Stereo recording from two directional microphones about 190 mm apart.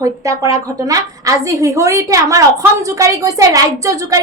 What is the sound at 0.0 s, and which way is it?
A woman's voice, 15° right (ahead or behind).